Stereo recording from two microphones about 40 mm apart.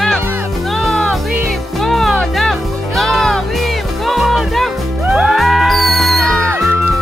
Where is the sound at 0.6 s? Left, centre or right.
Centre.